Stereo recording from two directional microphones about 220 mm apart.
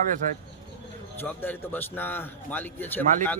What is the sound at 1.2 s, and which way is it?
A man's voice, 10° left (ahead or behind).